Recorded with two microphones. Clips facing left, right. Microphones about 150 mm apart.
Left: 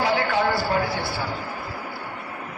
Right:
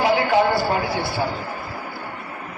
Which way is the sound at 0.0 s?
15° right (ahead or behind).